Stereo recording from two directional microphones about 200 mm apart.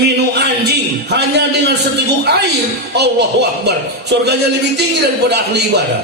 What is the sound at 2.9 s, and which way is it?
A man's voice, 55° right (ahead or behind).